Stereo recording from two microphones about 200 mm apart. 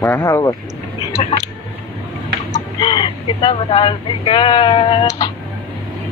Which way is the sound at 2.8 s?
25° left (ahead or behind).